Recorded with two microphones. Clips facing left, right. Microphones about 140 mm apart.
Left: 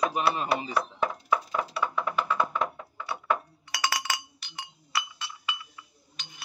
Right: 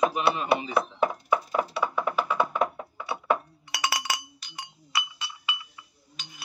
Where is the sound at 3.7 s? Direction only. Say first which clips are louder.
Right 1 dB; 5° right (ahead or behind).